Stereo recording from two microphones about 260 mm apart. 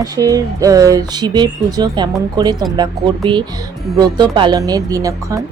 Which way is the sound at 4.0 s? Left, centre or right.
Centre.